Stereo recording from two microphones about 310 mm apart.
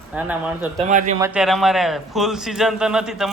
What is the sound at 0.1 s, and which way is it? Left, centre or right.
Speech, centre.